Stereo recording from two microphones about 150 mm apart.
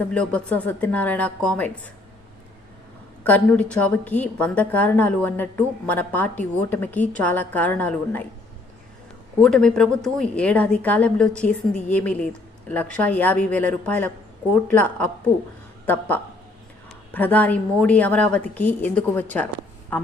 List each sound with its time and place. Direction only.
0.1 s a woman's voice: 10° left (ahead or behind)
3.2 s a woman's voice: 10° left (ahead or behind)
9.4 s a woman's voice: 5° left (ahead or behind)